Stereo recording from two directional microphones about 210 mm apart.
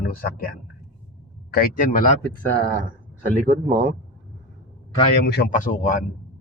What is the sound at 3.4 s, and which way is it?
Speech, 40° right (ahead or behind).